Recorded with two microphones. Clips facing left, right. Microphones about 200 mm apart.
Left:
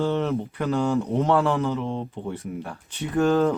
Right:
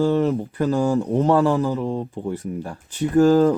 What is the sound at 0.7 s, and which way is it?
Speech, 15° right (ahead or behind).